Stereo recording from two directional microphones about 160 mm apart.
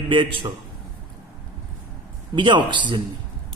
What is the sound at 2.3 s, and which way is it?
Speech, 30° right (ahead or behind).